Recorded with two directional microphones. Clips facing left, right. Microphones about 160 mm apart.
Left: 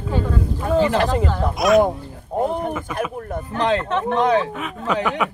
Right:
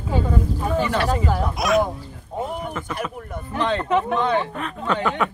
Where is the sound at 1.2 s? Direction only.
5° right (ahead or behind).